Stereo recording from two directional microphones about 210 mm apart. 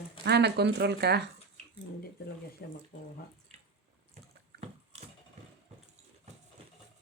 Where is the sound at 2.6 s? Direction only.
50° left (ahead or behind).